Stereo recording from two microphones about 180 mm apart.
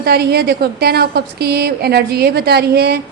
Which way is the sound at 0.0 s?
60° right (ahead or behind).